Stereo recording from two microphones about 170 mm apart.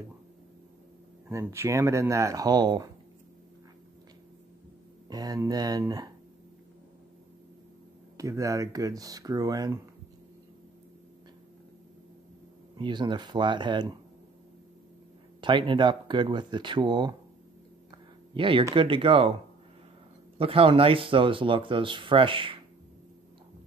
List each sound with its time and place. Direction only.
1.3 s speech: 15° right (ahead or behind)
5.1 s speech: 25° right (ahead or behind)
8.2 s speech: 20° right (ahead or behind)
12.7 s speech: 25° right (ahead or behind)
15.4 s speech: 30° right (ahead or behind)
17.9 s a sound: 30° right (ahead or behind)
18.7 s speech: 30° right (ahead or behind)
20.3 s speech: 35° right (ahead or behind)